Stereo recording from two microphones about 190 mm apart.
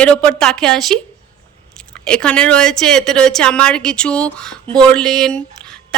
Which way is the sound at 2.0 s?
5° left (ahead or behind).